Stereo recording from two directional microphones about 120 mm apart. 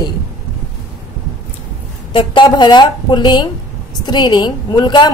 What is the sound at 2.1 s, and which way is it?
A woman's voice, 40° left (ahead or behind).